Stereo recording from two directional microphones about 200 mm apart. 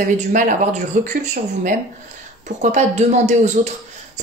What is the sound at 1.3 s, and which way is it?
Speech, 40° right (ahead or behind).